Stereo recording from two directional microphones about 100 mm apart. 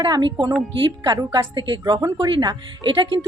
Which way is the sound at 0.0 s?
50° right (ahead or behind).